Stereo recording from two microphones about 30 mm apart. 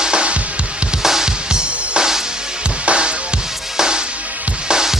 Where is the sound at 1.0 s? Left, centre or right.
Centre; by 3.1 s right.